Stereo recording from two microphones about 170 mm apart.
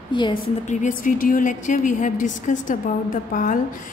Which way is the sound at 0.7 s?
45° left (ahead or behind).